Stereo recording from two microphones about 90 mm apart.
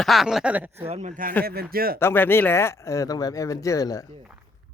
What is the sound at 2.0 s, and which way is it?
Speech, 25° left (ahead or behind).